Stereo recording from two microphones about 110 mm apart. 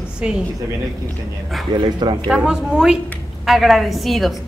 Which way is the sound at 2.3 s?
5° right (ahead or behind).